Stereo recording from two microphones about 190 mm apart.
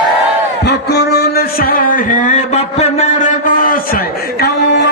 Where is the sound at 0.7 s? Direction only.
55° left (ahead or behind).